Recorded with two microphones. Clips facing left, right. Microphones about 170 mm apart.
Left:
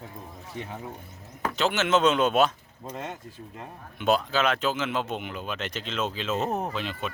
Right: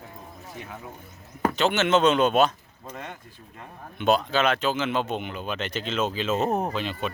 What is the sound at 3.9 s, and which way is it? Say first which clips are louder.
Speech: right 2 dB; 5° left (ahead or behind).